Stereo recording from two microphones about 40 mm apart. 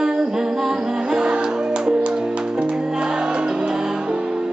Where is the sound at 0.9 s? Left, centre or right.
Right.